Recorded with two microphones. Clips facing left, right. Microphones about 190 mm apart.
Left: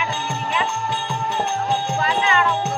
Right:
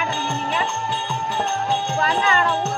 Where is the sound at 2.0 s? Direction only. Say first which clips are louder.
Even; 40° right (ahead or behind).